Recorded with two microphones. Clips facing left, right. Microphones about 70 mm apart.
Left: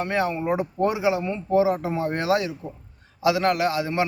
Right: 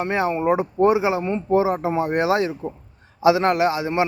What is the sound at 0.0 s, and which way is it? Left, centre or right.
A man's voice, right.